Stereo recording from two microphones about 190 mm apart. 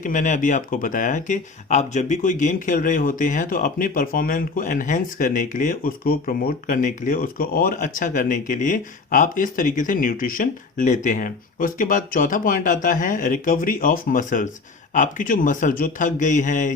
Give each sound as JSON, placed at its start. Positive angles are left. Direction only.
{"t": 0.0, "sound": "speech", "side_deg": 40}